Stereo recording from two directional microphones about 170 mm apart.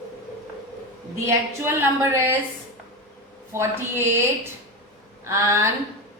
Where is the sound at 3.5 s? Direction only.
15° right (ahead or behind).